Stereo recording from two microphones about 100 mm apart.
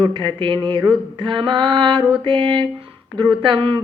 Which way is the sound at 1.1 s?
55° right (ahead or behind).